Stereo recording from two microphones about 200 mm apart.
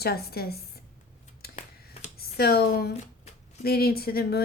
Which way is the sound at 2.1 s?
50° left (ahead or behind).